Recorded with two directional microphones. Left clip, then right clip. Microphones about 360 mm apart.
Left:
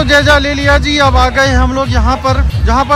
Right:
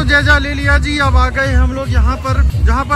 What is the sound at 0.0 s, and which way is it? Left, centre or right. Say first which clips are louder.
Speech: left 4 dB; centre.